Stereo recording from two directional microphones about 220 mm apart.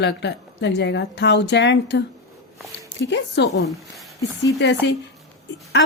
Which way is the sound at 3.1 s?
50° left (ahead or behind).